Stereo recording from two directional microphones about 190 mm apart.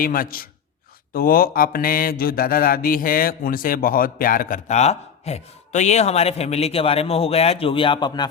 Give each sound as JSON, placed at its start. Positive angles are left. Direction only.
{"t": 0.0, "sound": "mantra", "side_deg": 50}